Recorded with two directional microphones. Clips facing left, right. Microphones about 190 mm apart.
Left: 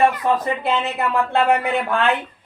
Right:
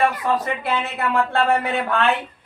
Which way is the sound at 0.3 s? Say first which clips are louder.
Left 2 dB; 20° left (ahead or behind).